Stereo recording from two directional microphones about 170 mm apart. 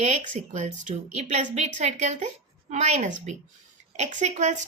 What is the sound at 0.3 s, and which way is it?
A woman's voice, 45° right (ahead or behind).